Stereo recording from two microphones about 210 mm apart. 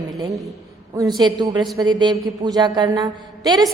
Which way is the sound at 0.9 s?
20° right (ahead or behind).